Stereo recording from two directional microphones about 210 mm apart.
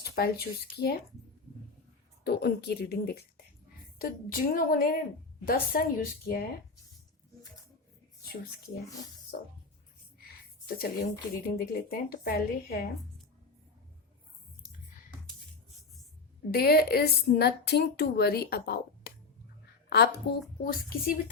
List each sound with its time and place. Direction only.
0.0 s a woman's voice: 50° left (ahead or behind)
2.2 s a woman's voice: 50° left (ahead or behind)
10.7 s a woman's voice: 45° left (ahead or behind)
16.5 s a woman's voice: 50° left (ahead or behind)